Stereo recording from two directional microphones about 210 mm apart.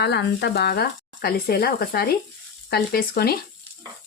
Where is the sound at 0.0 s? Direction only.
55° left (ahead or behind).